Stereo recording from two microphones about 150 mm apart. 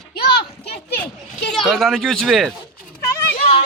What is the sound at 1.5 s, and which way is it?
Speech, centre (ahead or behind).